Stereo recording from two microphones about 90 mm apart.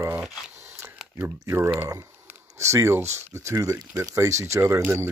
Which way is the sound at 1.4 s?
30° right (ahead or behind).